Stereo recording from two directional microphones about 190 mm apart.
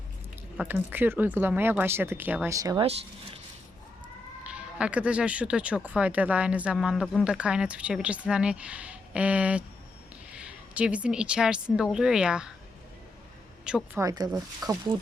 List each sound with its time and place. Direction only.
0.5 s speech: 5° right (ahead or behind)
4.4 s a woman's voice: 5° right (ahead or behind)
13.7 s a woman's voice: 5° right (ahead or behind)
14.0 s speech: 20° right (ahead or behind)